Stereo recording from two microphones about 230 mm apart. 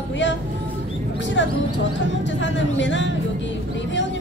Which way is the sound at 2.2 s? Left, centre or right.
Left.